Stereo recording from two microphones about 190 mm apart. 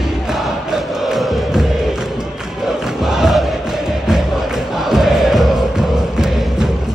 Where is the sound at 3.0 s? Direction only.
Centre (ahead or behind).